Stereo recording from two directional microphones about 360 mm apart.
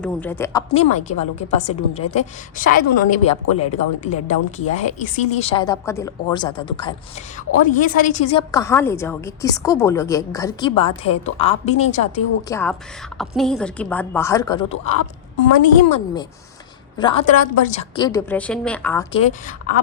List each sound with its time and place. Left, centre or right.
0.0 s a woman's voice: centre
13.1 s a woman's voice: centre
17.0 s a woman's voice: centre
19.2 s a woman's voice: centre